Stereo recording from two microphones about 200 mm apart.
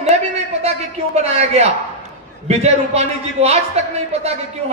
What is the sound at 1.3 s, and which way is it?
A man's voice, 30° right (ahead or behind).